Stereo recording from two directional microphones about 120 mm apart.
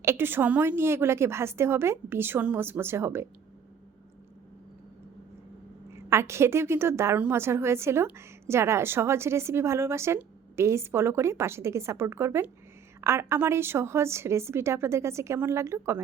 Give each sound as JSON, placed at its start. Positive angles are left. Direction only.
{"t": 0.0, "sound": "a woman's voice", "side_deg": -20}
{"t": 5.9, "sound": "a woman's voice", "side_deg": -20}